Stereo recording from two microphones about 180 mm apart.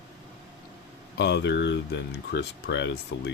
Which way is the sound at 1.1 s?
70° left (ahead or behind).